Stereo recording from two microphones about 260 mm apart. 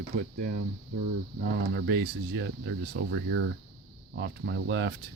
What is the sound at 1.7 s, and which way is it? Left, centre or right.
Speech, right.